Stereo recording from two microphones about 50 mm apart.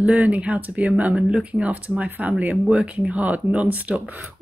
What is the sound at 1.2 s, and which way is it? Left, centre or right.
Speech, centre.